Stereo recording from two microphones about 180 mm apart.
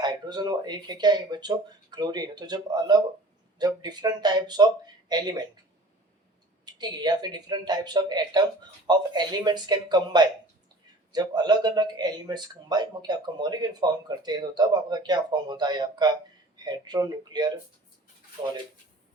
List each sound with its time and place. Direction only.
0.0 s speech: 25° right (ahead or behind)
6.7 s speech: 20° right (ahead or behind)